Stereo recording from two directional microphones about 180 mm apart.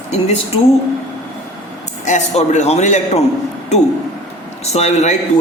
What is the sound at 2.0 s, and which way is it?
A man's voice, 40° left (ahead or behind).